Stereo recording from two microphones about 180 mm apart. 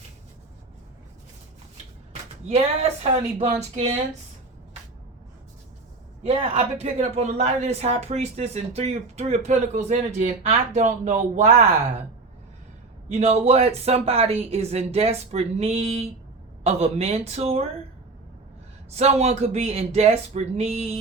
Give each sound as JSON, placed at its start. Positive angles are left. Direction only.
{"t": 3.0, "sound": "speech", "side_deg": -35}
{"t": 6.2, "sound": "speech", "side_deg": -35}
{"t": 13.1, "sound": "speech", "side_deg": -40}
{"t": 18.9, "sound": "speech", "side_deg": -35}